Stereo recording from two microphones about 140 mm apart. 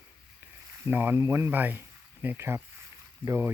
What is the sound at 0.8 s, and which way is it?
Speech, 15° right (ahead or behind).